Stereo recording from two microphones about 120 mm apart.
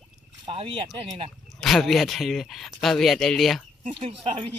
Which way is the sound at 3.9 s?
50° right (ahead or behind).